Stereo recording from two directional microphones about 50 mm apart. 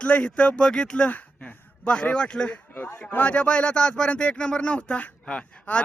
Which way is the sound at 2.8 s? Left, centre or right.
Left.